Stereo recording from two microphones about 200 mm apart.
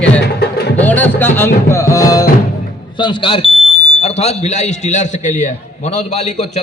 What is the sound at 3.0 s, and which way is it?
A man's voice, 25° left (ahead or behind).